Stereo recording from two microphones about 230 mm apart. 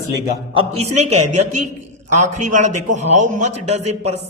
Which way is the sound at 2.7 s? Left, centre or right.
Right.